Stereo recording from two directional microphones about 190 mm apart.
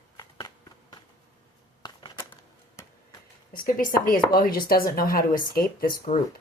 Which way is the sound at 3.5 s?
50° left (ahead or behind).